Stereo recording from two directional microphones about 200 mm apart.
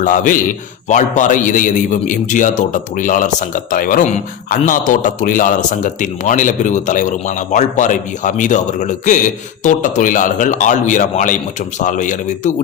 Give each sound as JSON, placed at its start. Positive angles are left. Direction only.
{"t": 0.0, "sound": "a man's voice", "side_deg": 40}